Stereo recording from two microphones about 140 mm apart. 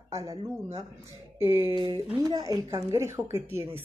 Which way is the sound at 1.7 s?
30° right (ahead or behind).